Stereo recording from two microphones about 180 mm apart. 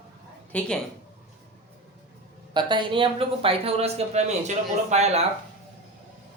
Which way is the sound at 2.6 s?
25° right (ahead or behind).